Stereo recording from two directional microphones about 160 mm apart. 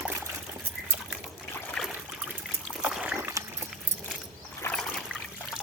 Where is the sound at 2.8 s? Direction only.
5° right (ahead or behind).